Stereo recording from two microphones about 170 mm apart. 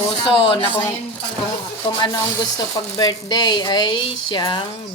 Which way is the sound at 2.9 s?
25° left (ahead or behind).